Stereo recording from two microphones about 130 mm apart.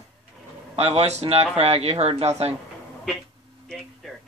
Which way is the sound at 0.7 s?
55° right (ahead or behind).